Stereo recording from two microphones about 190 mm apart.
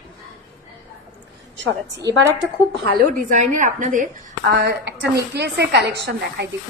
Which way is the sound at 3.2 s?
40° right (ahead or behind).